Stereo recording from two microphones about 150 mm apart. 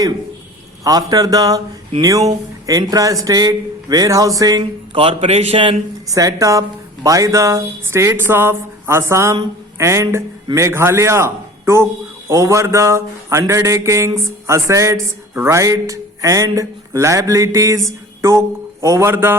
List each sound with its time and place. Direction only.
0.9 s speech: 25° right (ahead or behind)
4.9 s a man's voice: 35° right (ahead or behind)
6.1 s speech: 20° right (ahead or behind)